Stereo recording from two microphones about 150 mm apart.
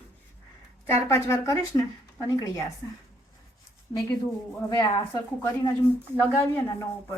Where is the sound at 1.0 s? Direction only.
20° left (ahead or behind).